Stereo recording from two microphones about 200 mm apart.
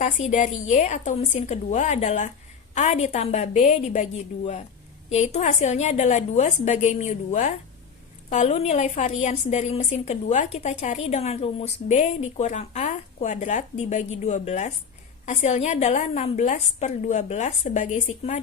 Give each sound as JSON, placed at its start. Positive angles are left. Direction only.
{"t": 0.0, "sound": "a woman's voice", "side_deg": 35}